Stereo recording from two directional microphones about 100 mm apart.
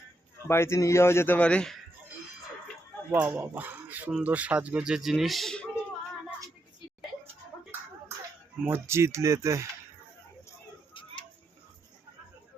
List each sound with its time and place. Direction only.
0.4 s speech: 25° left (ahead or behind)
1.4 s speech: 10° left (ahead or behind)
3.1 s speech: 20° right (ahead or behind); by 5.6 s 5° left (ahead or behind)
8.6 s speech: 25° right (ahead or behind)